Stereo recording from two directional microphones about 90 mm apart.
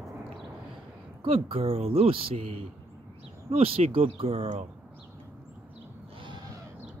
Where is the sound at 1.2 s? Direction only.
90° right.